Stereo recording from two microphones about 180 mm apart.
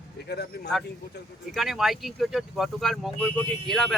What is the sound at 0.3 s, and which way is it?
Speech, 65° left (ahead or behind).